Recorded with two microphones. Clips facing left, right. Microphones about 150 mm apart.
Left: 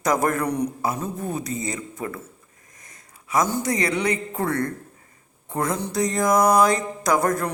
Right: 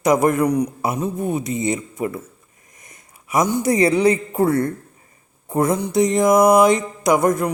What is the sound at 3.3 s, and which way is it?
Mantra, 20° right (ahead or behind).